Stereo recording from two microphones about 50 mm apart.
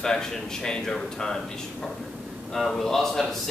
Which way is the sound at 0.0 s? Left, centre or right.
Centre.